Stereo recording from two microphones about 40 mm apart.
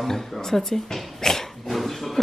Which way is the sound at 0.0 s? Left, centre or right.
Centre.